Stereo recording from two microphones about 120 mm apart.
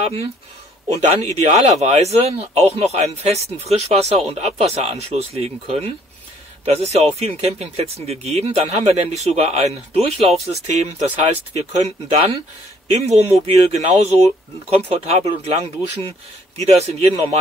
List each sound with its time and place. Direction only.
1.3 s speech: 65° right (ahead or behind)
14.9 s speech: 55° right (ahead or behind)